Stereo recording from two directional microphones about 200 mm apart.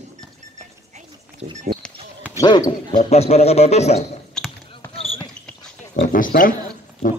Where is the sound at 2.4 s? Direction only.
20° left (ahead or behind).